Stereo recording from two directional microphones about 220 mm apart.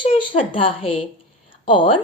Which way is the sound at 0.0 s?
25° left (ahead or behind).